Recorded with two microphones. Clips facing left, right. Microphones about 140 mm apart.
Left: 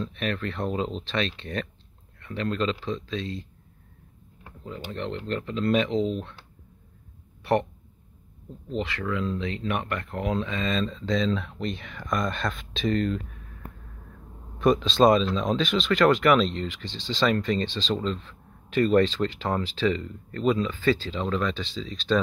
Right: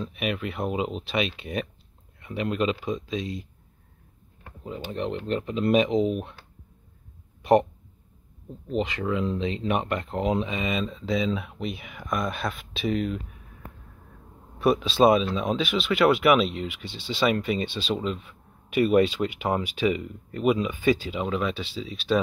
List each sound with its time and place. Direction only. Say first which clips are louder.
0.0 s speech: even; 10° right (ahead or behind)
4.6 s speech: right 3 dB; 15° right (ahead or behind)
8.5 s speech: right 3 dB; 20° right (ahead or behind)
14.6 s speech: even; 5° right (ahead or behind)